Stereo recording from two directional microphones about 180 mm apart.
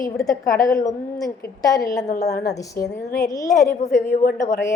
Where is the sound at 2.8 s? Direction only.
55° left (ahead or behind).